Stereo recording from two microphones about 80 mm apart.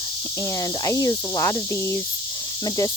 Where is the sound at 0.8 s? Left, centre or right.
Left.